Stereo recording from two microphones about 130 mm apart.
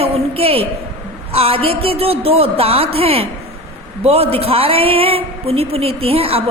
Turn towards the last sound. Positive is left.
turn(degrees=-45)  # may be behind; listen again after turning